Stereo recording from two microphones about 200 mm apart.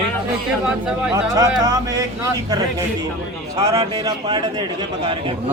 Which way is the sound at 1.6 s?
20° right (ahead or behind).